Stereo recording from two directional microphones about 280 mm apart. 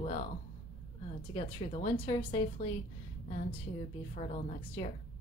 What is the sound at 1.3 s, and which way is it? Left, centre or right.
A woman's voice, centre.